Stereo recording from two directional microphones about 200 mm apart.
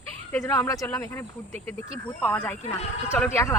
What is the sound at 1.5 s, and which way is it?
Speech, 35° right (ahead or behind).